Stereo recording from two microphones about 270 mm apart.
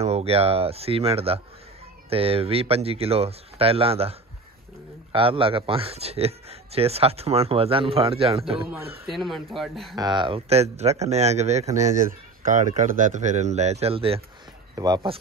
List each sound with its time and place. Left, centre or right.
0.0 s speech: right
9.0 s speech: centre
9.9 s speech: centre